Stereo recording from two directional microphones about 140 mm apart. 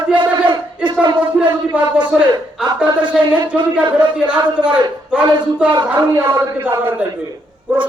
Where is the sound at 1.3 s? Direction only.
5° right (ahead or behind).